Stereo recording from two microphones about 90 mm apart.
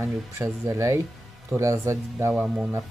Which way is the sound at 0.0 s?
35° right (ahead or behind).